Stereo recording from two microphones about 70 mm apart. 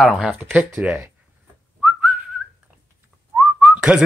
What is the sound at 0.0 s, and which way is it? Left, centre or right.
Speech, centre.